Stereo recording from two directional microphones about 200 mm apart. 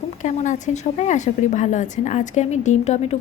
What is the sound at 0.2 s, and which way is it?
A woman's voice, 40° left (ahead or behind).